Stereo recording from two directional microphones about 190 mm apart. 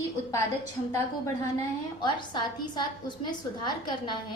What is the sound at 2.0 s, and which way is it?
A woman's voice, 25° left (ahead or behind).